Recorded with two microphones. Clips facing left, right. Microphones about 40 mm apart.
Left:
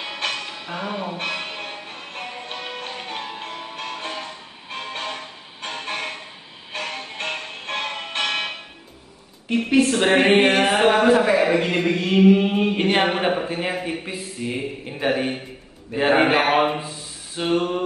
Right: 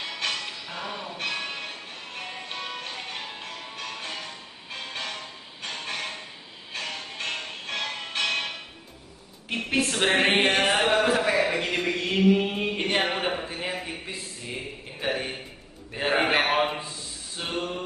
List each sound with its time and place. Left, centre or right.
0.1 s music: left
10.0 s a sound: left
11.3 s a man's voice: left
11.9 s speech: centre
13.7 s a sound: left
17.5 s a man's voice: left